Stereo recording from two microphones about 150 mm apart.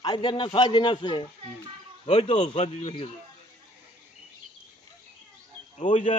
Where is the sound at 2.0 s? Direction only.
40° left (ahead or behind).